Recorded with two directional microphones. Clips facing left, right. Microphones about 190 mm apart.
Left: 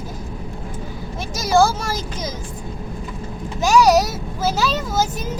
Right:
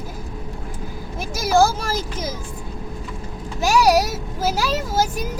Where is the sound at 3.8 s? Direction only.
10° right (ahead or behind).